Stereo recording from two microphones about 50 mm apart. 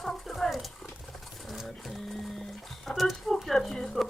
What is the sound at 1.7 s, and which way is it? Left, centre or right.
Speech, centre.